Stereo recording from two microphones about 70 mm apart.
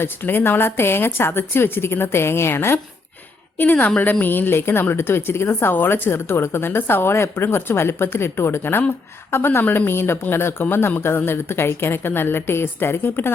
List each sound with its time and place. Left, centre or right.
0.0 s a woman's voice: left
3.6 s a woman's voice: left